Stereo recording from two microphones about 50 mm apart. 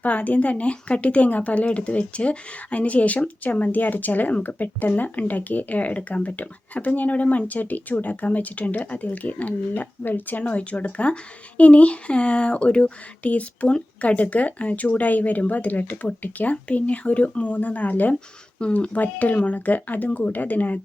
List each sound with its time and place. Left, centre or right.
0.0 s a woman's voice: left